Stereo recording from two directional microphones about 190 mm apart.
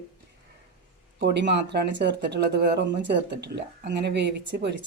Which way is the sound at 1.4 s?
60° right (ahead or behind).